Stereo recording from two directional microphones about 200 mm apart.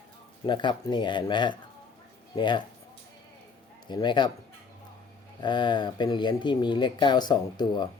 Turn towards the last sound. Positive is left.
turn(degrees=20)  # may be behind; listen again after turning